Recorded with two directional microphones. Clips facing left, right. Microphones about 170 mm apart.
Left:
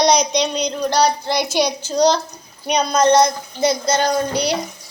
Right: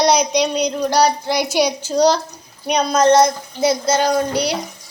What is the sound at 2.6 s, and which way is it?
Child singing, centre (ahead or behind).